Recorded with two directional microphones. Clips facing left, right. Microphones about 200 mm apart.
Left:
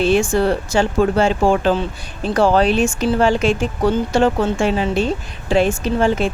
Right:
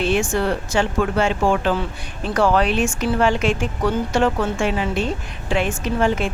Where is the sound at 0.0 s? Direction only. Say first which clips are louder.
Left 4 dB; 35° left (ahead or behind).